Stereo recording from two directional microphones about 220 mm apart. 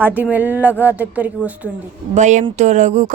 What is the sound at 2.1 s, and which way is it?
Speech, 30° right (ahead or behind).